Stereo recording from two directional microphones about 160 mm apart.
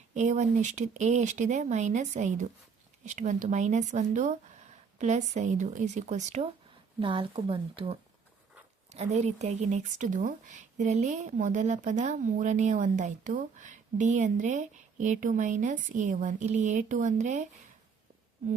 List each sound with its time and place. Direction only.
0.1 s speech: 50° right (ahead or behind)
7.0 s speech: 30° right (ahead or behind); by 17.5 s 50° right (ahead or behind)